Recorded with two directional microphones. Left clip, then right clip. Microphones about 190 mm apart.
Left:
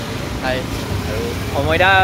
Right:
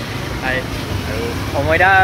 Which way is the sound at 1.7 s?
5° left (ahead or behind).